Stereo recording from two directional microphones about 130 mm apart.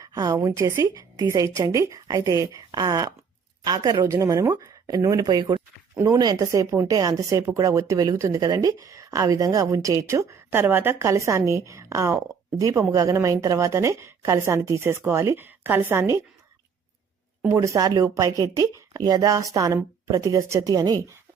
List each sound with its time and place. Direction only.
0.0 s a sound: 30° right (ahead or behind)
0.4 s speech: 25° right (ahead or behind)
17.5 s speech: 25° right (ahead or behind)